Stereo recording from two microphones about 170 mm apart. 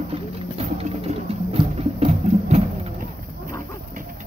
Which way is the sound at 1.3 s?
35° right (ahead or behind).